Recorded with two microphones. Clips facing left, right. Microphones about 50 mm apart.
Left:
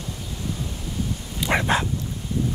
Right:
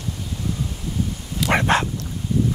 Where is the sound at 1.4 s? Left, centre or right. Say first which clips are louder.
Right 3 dB; right.